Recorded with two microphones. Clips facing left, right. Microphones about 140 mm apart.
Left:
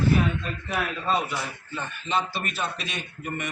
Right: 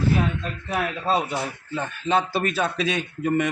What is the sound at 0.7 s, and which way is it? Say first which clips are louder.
Speech: right 3 dB; 35° right (ahead or behind).